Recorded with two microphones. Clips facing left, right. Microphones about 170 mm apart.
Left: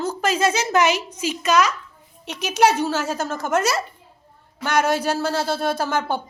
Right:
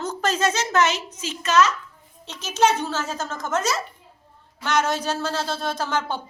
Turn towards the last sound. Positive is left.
turn(degrees=10)  # may be behind; listen again after turning